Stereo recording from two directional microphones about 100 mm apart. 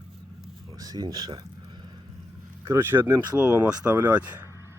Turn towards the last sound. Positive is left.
turn(degrees=-15)  # may be behind; listen again after turning